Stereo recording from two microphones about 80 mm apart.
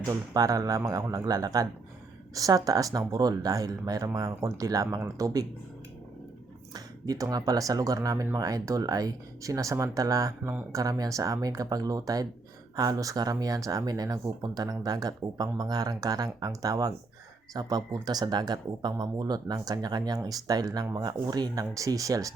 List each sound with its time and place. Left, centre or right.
0.1 s speech: right
6.7 s speech: right